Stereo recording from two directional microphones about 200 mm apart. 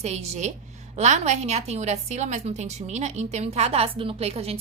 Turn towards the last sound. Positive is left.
turn(degrees=-30)  # may be behind; listen again after turning